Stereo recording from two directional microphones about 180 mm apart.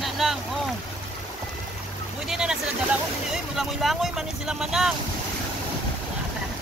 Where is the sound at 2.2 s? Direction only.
5° right (ahead or behind).